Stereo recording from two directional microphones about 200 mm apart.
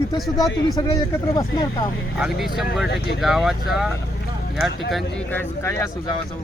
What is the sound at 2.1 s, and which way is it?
Speech, centre (ahead or behind).